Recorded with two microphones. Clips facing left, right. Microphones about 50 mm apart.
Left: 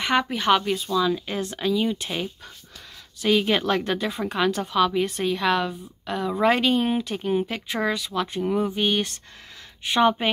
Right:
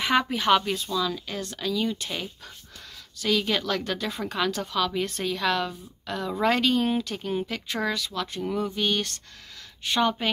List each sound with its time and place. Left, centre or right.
0.0 s speech: centre
0.9 s a woman's voice: centre